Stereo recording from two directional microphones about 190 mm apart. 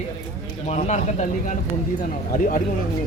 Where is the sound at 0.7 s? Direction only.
40° left (ahead or behind).